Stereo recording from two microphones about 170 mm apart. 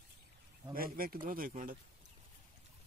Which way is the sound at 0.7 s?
60° right (ahead or behind).